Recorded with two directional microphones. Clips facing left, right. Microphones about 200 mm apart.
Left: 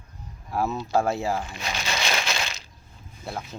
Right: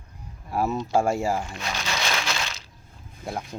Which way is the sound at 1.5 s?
10° left (ahead or behind).